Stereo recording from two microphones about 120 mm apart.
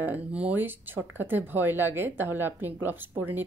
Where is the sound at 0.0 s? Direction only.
15° right (ahead or behind).